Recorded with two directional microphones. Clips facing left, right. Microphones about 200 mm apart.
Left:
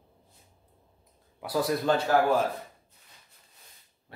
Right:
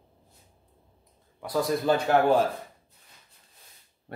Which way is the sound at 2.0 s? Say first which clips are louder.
Right 3 dB; 30° right (ahead or behind).